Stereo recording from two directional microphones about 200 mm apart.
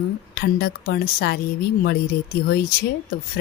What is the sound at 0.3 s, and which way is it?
A woman's voice, 50° left (ahead or behind).